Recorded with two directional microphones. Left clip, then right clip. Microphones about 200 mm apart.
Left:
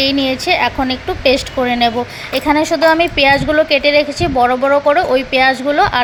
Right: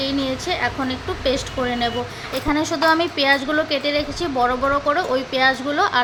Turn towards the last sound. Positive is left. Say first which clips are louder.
# left 6 dB
turn(degrees=15)  # may be behind; listen again after turning